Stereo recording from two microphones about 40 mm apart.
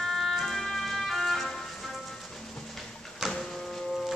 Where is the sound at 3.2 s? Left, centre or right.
Centre.